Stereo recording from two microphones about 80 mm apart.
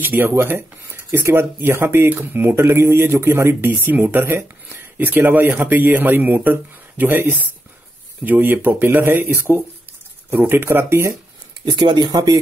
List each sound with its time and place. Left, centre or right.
0.0 s speech: right
11.7 s speech: right